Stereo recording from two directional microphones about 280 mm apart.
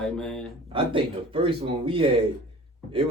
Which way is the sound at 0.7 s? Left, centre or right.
Centre.